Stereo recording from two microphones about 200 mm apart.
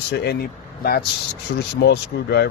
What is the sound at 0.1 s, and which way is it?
Speech, 55° left (ahead or behind).